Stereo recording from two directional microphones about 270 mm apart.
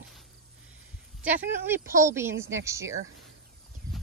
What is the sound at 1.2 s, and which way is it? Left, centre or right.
A woman's voice, centre.